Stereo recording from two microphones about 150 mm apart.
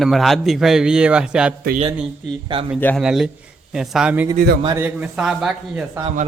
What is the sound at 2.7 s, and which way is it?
Speech, 10° left (ahead or behind).